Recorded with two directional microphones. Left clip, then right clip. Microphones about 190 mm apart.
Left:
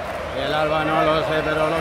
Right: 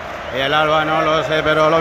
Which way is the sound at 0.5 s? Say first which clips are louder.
Right 5 dB; 5° right (ahead or behind).